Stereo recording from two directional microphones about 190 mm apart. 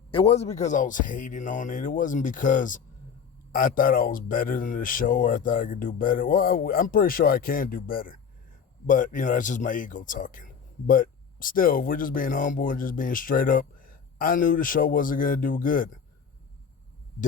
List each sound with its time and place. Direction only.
0.1 s speech: 30° left (ahead or behind); by 15.9 s 45° left (ahead or behind)